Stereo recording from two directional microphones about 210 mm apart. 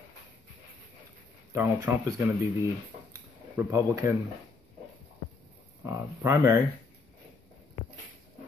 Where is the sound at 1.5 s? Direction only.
15° right (ahead or behind).